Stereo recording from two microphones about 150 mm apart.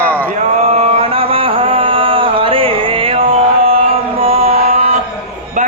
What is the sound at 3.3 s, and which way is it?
Music, 40° right (ahead or behind).